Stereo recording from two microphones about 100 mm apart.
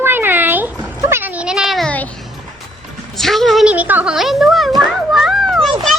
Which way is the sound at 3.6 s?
15° right (ahead or behind).